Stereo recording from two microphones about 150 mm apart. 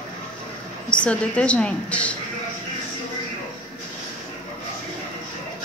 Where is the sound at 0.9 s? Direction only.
10° left (ahead or behind).